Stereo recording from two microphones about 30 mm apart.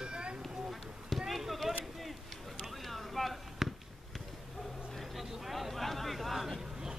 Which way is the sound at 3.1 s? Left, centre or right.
Centre.